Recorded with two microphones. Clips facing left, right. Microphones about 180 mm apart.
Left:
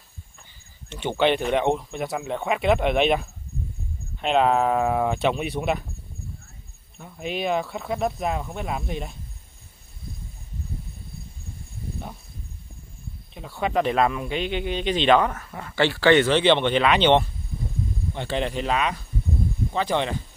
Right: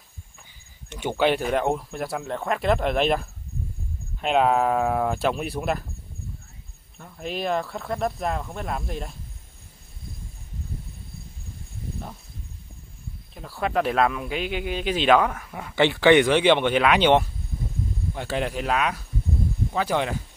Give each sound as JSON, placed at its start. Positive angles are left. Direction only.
{"t": 0.8, "sound": "speech", "side_deg": -10}
{"t": 7.0, "sound": "speech", "side_deg": 0}
{"t": 13.3, "sound": "speech", "side_deg": 0}
{"t": 15.7, "sound": "speech", "side_deg": -20}